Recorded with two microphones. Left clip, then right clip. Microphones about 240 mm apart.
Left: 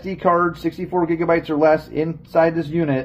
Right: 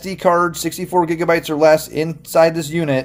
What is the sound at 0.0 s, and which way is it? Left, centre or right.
Speech, right.